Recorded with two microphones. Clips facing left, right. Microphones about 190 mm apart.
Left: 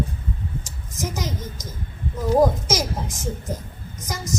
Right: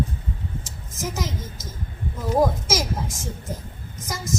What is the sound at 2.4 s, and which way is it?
Speech, 15° left (ahead or behind).